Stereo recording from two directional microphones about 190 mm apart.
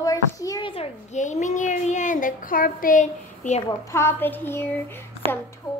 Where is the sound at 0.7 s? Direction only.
35° left (ahead or behind).